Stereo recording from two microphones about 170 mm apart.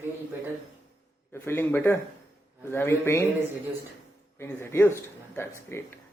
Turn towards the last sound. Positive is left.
turn(degrees=15)  # may be behind; listen again after turning